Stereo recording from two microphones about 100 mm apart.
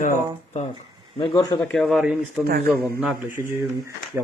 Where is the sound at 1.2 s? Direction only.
40° left (ahead or behind).